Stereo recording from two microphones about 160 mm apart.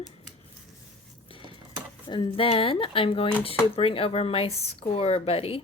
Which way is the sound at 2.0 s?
30° left (ahead or behind).